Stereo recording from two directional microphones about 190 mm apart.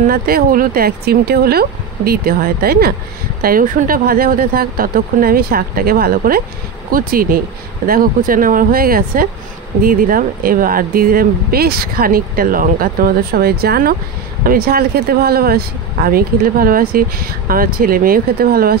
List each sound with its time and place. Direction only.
0.0 s speech: 50° right (ahead or behind)